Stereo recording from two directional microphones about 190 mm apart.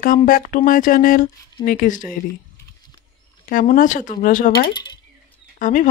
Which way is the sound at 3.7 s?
45° left (ahead or behind).